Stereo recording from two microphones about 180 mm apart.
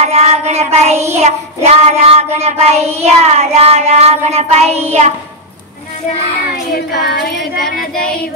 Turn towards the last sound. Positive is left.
turn(degrees=60)  # may be behind; listen again after turning